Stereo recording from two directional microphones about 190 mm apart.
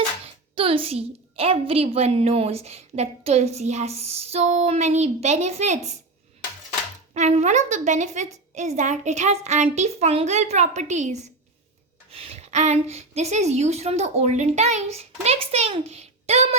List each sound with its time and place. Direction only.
0.5 s a woman's voice: 30° right (ahead or behind)
7.1 s a woman's voice: 35° right (ahead or behind)